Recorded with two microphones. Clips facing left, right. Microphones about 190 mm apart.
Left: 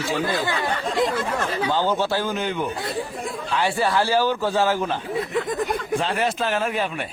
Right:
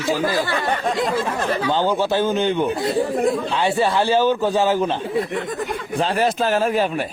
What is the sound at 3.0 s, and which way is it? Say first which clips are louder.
Speech: right 11 dB; 70° right (ahead or behind).